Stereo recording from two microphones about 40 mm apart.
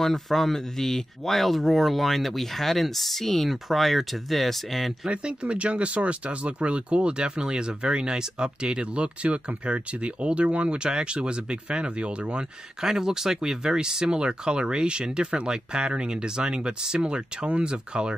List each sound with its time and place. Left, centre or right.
0.0 s speech: centre
5.0 s speech: right
12.8 s speech: centre